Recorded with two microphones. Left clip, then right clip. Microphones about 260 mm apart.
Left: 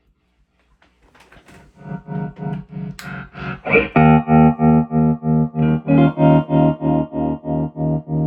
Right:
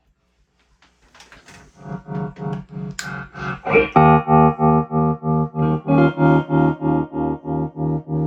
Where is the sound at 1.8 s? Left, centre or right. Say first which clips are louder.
Even; centre.